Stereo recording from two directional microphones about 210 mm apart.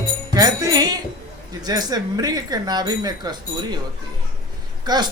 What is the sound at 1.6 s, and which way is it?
Speech, 20° right (ahead or behind).